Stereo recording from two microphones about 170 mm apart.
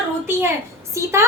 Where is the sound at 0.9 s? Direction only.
15° right (ahead or behind).